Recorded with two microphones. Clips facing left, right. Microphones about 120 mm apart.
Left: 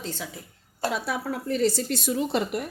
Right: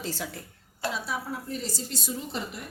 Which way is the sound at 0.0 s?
5° right (ahead or behind).